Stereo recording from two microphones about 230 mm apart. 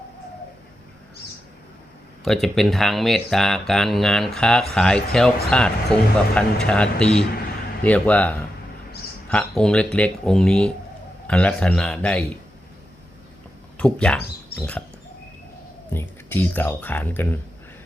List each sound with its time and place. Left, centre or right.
2.2 s speech: centre
13.7 s speech: centre
15.9 s speech: centre